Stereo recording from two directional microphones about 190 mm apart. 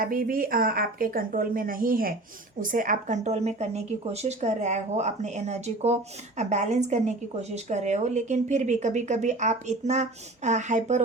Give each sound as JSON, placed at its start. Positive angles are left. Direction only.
{"t": 0.0, "sound": "a woman's voice", "side_deg": -50}